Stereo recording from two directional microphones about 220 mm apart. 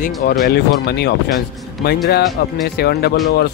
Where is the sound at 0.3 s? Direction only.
45° left (ahead or behind).